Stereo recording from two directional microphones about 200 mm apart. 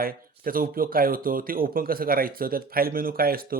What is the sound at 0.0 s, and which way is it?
Speech, 45° right (ahead or behind).